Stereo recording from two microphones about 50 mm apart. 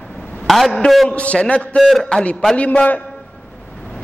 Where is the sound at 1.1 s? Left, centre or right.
Left.